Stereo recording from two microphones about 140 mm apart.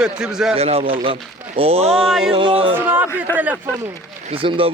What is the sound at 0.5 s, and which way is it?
A man's voice, 45° right (ahead or behind).